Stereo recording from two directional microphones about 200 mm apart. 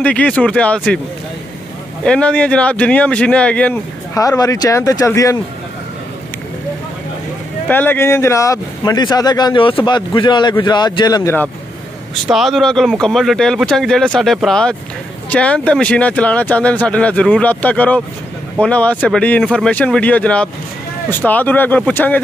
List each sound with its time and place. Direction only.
0.0 s speech: 5° left (ahead or behind)
2.0 s speech: 5° left (ahead or behind)
7.6 s speech: 10° left (ahead or behind)
12.3 s speech: centre (ahead or behind)